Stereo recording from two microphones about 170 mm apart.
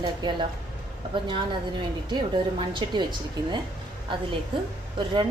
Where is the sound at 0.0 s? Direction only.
25° right (ahead or behind).